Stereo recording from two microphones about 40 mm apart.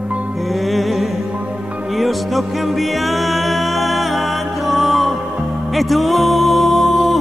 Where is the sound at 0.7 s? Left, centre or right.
Centre.